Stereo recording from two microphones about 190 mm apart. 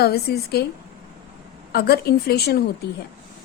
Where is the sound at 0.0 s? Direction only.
55° left (ahead or behind).